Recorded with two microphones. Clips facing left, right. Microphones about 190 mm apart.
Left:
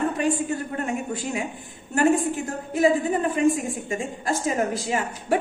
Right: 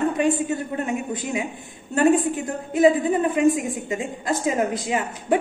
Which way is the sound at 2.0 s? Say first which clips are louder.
Right 2 dB; 25° right (ahead or behind).